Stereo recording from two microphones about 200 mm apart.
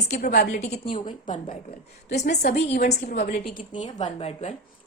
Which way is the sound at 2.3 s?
55° left (ahead or behind).